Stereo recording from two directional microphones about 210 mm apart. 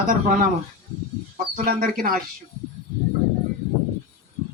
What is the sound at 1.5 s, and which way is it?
Speech, 45° right (ahead or behind).